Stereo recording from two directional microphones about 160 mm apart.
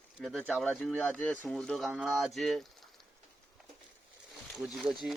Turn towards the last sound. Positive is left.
turn(degrees=0)  # may be behind; listen again after turning